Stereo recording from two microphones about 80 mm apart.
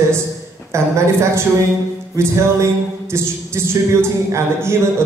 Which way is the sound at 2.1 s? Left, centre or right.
Right.